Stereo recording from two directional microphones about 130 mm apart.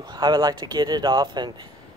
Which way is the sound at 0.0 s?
35° right (ahead or behind).